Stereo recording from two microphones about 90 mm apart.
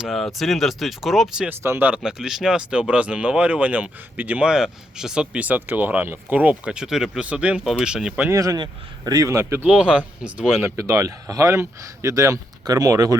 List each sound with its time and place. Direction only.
0.0 s speech: centre (ahead or behind)
1.5 s speech: 25° right (ahead or behind)
2.0 s speech: 5° right (ahead or behind)
7.6 s speech: centre (ahead or behind)
8.3 s speech: 35° right (ahead or behind)
8.5 s speech: 55° right (ahead or behind)
9.1 s speech: 35° right (ahead or behind)
9.6 s speech: 10° right (ahead or behind)
10.8 s speech: 35° right (ahead or behind)